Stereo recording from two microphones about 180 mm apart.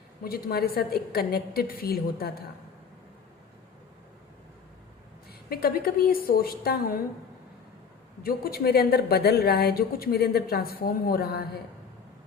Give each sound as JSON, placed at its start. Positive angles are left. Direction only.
{"t": 0.3, "sound": "a woman's voice", "side_deg": 55}
{"t": 5.5, "sound": "a woman's voice", "side_deg": 60}
{"t": 8.2, "sound": "a woman's voice", "side_deg": 55}